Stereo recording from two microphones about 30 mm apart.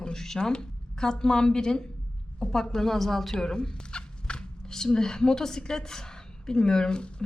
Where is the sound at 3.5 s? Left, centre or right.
Left.